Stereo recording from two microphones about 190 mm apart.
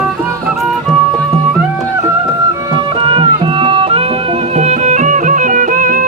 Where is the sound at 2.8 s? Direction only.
25° right (ahead or behind); by 6.1 s 45° right (ahead or behind).